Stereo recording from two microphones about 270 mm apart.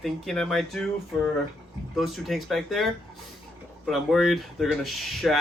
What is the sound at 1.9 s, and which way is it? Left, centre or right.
Speech, centre.